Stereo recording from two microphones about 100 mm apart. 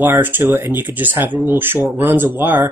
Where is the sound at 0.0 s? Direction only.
20° right (ahead or behind).